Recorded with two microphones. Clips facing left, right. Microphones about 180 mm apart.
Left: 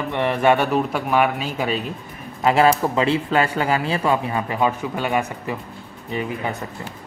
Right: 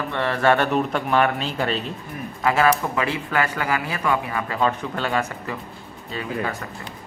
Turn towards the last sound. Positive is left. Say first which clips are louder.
# left 2 dB
turn(degrees=20)  # may be behind; listen again after turning